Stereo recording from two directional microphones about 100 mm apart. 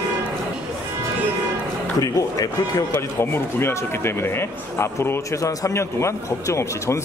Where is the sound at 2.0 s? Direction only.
40° left (ahead or behind).